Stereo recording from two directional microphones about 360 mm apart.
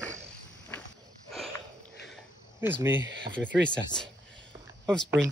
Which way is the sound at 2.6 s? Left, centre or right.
Centre.